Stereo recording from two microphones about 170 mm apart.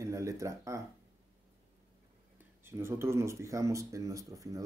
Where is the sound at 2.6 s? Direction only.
15° right (ahead or behind).